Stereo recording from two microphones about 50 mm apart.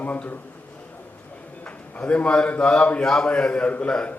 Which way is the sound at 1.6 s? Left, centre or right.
Left.